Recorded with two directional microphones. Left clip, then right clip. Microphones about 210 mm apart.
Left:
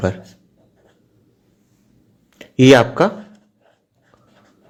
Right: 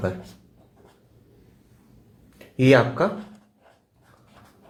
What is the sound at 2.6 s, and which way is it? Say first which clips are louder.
Speech: left 7 dB; 40° left (ahead or behind).